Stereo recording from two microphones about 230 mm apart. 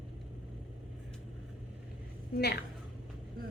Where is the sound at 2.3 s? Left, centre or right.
Left.